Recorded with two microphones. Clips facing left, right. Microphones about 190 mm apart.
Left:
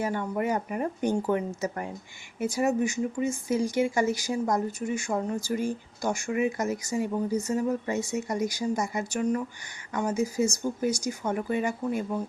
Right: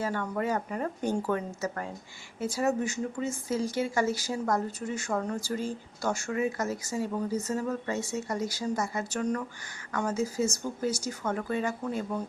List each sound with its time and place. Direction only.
0.0 s speech: 15° left (ahead or behind)